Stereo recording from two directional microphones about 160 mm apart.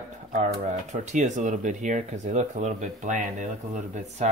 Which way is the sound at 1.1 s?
50° right (ahead or behind).